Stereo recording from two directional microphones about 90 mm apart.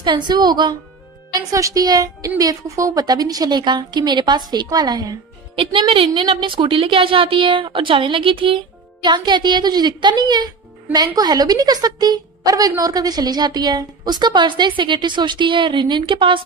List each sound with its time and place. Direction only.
0.0 s speech: 55° right (ahead or behind)
1.3 s a woman's voice: 40° right (ahead or behind)
5.6 s a woman's voice: 75° right (ahead or behind)
9.0 s a woman's voice: 55° right (ahead or behind)